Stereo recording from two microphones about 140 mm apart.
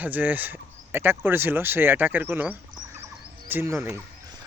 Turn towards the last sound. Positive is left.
turn(degrees=-15)  # may be behind; listen again after turning